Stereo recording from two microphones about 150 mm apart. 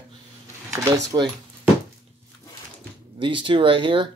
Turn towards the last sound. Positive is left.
turn(degrees=-35)  # may be behind; listen again after turning